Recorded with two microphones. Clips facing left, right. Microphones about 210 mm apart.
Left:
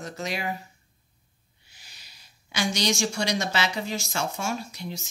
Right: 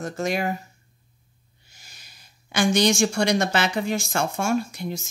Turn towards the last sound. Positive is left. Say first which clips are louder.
# right 8 dB
turn(degrees=-50)  # may be behind; listen again after turning